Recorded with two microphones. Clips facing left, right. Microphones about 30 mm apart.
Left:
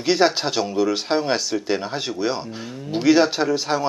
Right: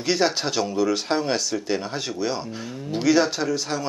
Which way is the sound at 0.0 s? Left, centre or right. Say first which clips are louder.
Left 4 dB; centre.